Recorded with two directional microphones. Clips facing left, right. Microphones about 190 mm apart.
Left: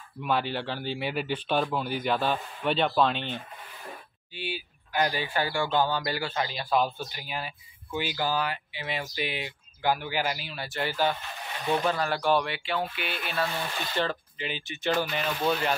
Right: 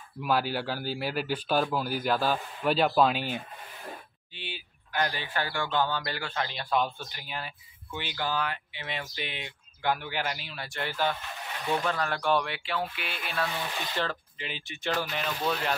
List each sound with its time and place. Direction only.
0.2 s speech: 5° right (ahead or behind)
4.4 s speech: 10° left (ahead or behind)